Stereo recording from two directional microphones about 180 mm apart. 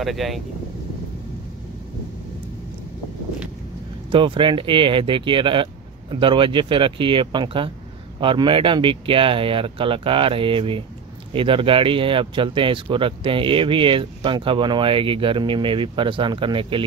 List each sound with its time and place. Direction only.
0.0 s speech: centre (ahead or behind)
4.1 s speech: 30° right (ahead or behind)